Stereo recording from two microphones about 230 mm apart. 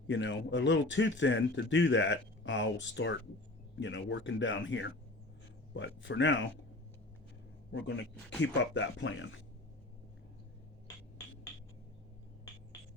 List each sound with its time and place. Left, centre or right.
0.1 s speech: left
7.7 s speech: left